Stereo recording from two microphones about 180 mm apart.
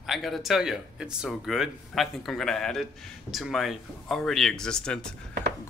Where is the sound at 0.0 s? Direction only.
Centre (ahead or behind).